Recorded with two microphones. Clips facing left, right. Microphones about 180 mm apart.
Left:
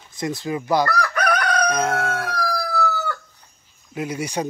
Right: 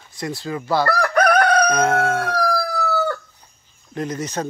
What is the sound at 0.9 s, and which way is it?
Chicken, 50° right (ahead or behind).